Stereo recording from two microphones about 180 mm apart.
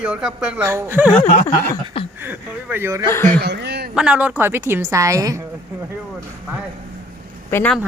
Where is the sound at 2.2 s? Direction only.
10° right (ahead or behind).